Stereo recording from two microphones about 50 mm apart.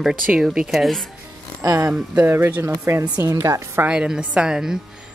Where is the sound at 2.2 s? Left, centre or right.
Right.